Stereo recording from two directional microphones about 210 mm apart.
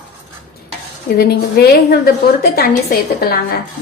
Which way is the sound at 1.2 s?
50° left (ahead or behind).